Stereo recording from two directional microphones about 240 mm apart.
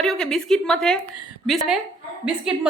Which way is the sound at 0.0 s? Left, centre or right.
Centre.